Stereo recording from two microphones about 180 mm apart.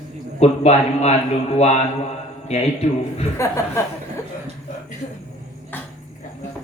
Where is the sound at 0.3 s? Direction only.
35° left (ahead or behind).